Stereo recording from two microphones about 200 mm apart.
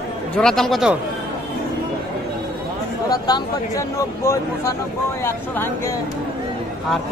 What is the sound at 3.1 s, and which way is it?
Speech, 15° left (ahead or behind).